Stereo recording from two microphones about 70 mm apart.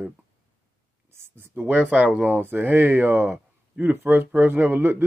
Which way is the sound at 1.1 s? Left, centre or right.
Right.